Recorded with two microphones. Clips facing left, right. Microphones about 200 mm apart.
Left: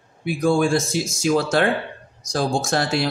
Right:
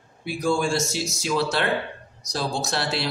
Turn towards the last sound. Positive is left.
turn(degrees=50)  # may be behind; listen again after turning